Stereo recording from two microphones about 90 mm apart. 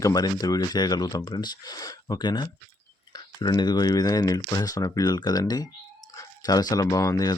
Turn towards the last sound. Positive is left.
turn(degrees=40)  # may be behind; listen again after turning